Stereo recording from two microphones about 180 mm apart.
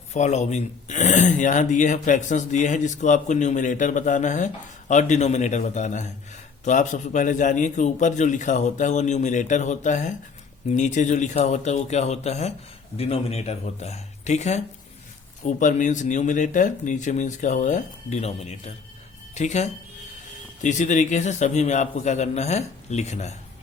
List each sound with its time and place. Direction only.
0.1 s a man's voice: 40° left (ahead or behind)